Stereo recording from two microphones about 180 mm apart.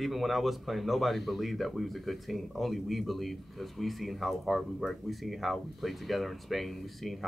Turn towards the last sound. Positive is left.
turn(degrees=0)  # may be behind; listen again after turning